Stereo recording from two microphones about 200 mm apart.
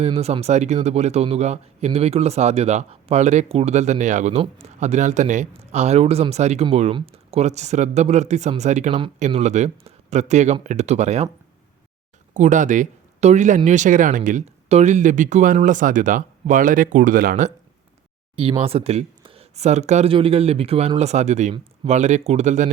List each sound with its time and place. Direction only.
0.0 s a man's voice: 30° right (ahead or behind)
12.3 s a man's voice: 40° right (ahead or behind)
18.3 s a man's voice: 25° right (ahead or behind)